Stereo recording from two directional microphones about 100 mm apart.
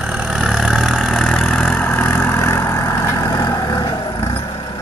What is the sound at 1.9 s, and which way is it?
Vehicle, 20° left (ahead or behind).